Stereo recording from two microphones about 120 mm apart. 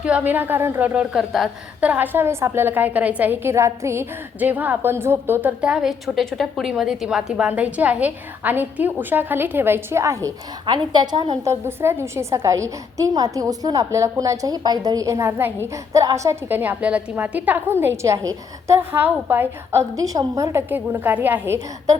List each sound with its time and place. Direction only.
0.0 s a woman's voice: 10° right (ahead or behind)
1.8 s a woman's voice: 15° right (ahead or behind)
10.7 s a woman's voice: 35° right (ahead or behind)
11.4 s a woman's voice: 20° right (ahead or behind)